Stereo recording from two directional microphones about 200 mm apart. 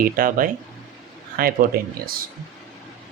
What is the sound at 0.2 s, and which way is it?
Speech, 45° right (ahead or behind).